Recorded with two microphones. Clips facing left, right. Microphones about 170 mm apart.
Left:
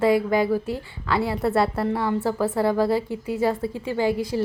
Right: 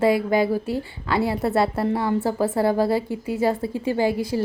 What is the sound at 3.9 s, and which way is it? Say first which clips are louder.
Speech: right 2 dB; 35° right (ahead or behind).